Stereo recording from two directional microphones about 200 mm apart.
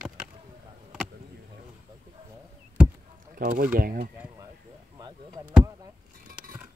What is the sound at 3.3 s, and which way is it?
Speech, 45° right (ahead or behind).